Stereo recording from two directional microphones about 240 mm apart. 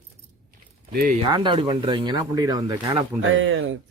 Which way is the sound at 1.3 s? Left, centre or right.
Centre.